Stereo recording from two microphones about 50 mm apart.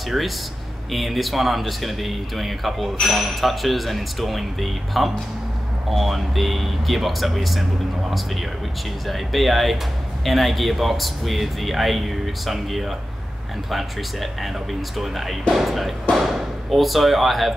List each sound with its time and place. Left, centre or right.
0.1 s speech: centre
9.0 s speech: centre